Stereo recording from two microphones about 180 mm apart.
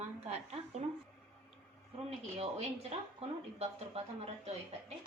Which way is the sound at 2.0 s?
35° right (ahead or behind).